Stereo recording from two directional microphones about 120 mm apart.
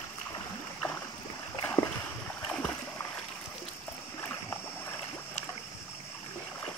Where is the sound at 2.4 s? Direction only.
10° left (ahead or behind).